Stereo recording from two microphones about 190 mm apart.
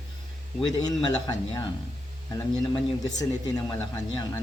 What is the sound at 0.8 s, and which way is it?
Speech, 20° left (ahead or behind).